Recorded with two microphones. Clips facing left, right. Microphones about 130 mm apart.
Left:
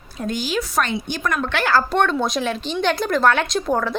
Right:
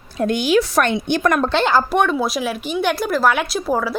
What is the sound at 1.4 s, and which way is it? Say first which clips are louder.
Speech: right 3 dB; 25° right (ahead or behind).